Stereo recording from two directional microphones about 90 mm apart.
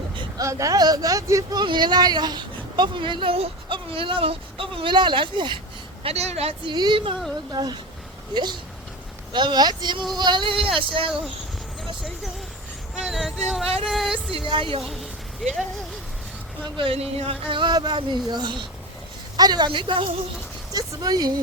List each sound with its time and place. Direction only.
0.3 s speech: 35° right (ahead or behind)
1.6 s speech: 55° right (ahead or behind)
6.0 s speech: 90° right
6.7 s speech: 50° right (ahead or behind); by 11.1 s 75° right (ahead or behind)
13.1 s speech: 5° right (ahead or behind)
14.3 s a woman's voice: 75° right (ahead or behind)
16.6 s speech: 70° right (ahead or behind)
20.7 s speech: 45° right (ahead or behind)